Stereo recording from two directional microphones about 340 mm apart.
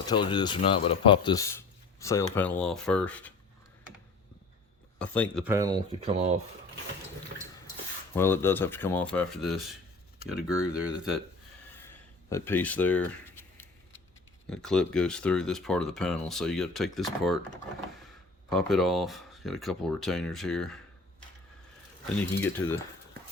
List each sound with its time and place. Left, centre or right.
0.0 s speech: centre
4.9 s speech: centre
5.5 s speech: centre
7.3 s toilet flush: right
8.1 s speech: centre
11.9 s a sound: centre
14.5 s speech: centre
18.4 s speech: centre
22.2 s speech: centre